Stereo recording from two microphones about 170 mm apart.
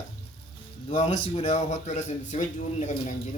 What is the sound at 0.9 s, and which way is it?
A man's voice, 35° left (ahead or behind).